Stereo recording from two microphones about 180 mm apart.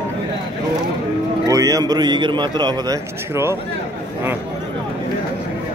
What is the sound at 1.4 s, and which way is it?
A man's voice, 20° right (ahead or behind).